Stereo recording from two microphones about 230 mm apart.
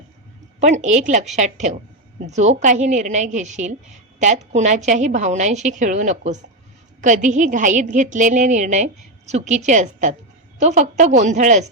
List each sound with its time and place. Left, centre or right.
0.6 s a woman's voice: right